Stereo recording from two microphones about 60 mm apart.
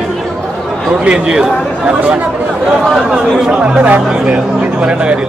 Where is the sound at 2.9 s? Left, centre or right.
Centre.